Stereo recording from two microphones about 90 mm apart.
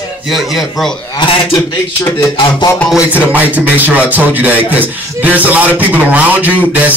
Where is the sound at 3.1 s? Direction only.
15° right (ahead or behind).